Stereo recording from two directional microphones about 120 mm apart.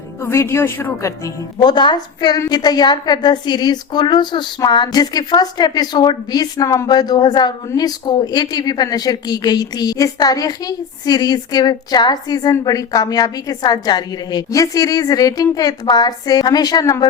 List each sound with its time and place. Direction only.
0.2 s a woman's voice: 20° left (ahead or behind)